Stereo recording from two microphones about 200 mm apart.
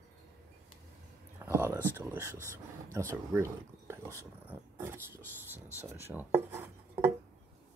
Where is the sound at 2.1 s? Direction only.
15° right (ahead or behind).